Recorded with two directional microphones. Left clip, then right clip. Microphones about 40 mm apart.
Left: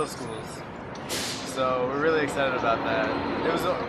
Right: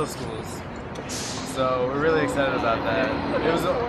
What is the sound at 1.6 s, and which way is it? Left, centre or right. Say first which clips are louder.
Speech: right 2 dB; centre.